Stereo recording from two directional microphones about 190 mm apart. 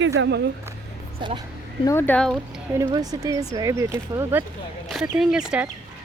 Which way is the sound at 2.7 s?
20° right (ahead or behind).